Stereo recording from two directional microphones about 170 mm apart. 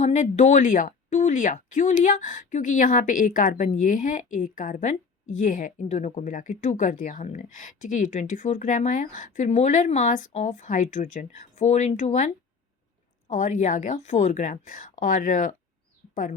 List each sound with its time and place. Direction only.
0.0 s speech: 45° left (ahead or behind)